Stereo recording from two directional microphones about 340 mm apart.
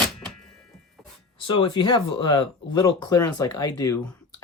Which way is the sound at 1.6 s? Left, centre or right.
Centre.